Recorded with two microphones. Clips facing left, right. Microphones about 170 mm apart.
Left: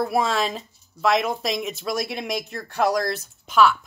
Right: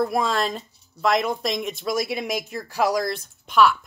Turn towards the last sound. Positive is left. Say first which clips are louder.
# even
turn(degrees=0)  # may be behind; listen again after turning